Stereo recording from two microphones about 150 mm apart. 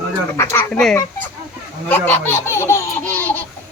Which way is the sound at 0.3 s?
15° left (ahead or behind).